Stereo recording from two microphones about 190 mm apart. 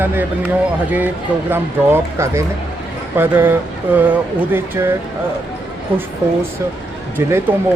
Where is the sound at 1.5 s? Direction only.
15° right (ahead or behind).